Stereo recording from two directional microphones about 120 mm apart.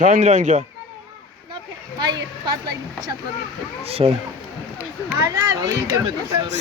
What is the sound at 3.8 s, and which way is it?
Speech, 55° right (ahead or behind).